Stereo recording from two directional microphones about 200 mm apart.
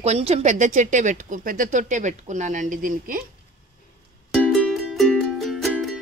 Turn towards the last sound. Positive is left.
turn(degrees=0)  # may be behind; listen again after turning